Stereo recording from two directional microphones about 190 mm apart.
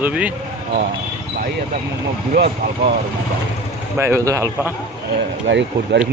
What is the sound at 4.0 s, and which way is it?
Speech, 15° right (ahead or behind).